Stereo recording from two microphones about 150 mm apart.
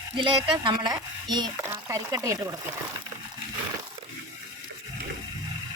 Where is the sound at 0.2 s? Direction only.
35° right (ahead or behind).